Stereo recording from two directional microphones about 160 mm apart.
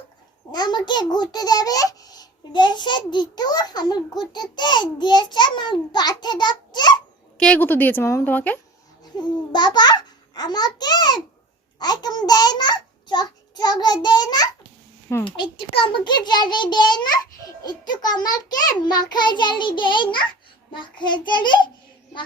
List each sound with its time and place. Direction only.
0.5 s a child's voice: 25° left (ahead or behind)
7.3 s a woman's voice: 5° left (ahead or behind)
9.1 s a child's voice: 25° left (ahead or behind)